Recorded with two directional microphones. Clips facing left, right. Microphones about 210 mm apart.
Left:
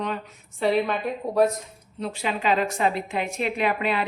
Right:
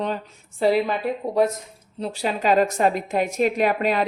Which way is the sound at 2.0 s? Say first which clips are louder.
Right 3 dB; 35° right (ahead or behind).